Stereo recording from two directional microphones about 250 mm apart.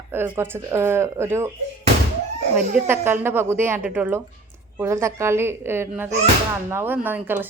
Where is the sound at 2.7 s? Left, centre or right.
Centre.